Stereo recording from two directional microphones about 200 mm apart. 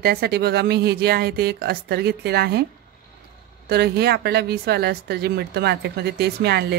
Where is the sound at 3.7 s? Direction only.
55° right (ahead or behind).